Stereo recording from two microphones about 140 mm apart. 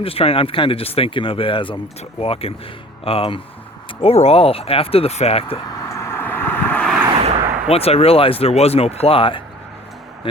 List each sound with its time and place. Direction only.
0.0 s speech: 45° left (ahead or behind)
5.6 s vehicle: 20° left (ahead or behind)
7.2 s a sound: 45° right (ahead or behind)
7.7 s speech: 45° left (ahead or behind)